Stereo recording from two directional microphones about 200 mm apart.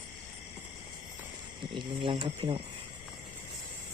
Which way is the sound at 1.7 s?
25° right (ahead or behind).